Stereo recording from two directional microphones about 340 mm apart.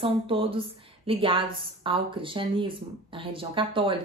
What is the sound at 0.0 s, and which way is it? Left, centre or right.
Speech, centre.